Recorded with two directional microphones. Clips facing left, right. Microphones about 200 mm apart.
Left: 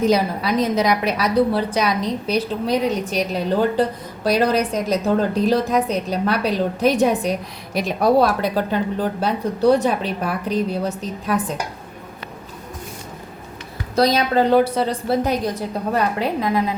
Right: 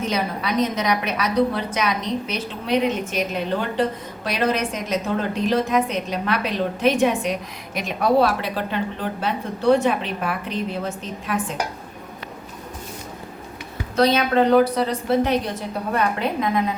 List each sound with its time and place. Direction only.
0.0 s a woman's voice: 35° left (ahead or behind)
13.9 s a woman's voice: 35° left (ahead or behind)